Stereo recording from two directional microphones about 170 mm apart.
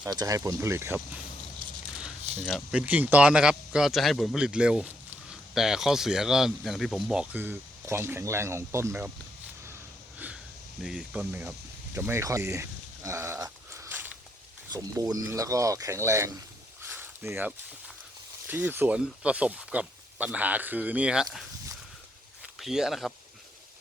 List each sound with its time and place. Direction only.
0.1 s speech: 20° right (ahead or behind)
10.8 s speech: 5° right (ahead or behind)
11.9 s a sound: 15° right (ahead or behind)
15.1 s speech: 20° right (ahead or behind)
16.9 s a sound: 10° right (ahead or behind)
18.4 s speech: 10° right (ahead or behind)
22.5 s speech: centre (ahead or behind)